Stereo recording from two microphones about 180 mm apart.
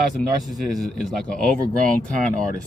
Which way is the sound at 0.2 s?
Centre (ahead or behind).